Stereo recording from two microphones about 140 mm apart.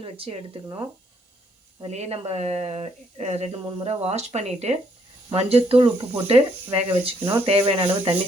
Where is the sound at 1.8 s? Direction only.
50° right (ahead or behind).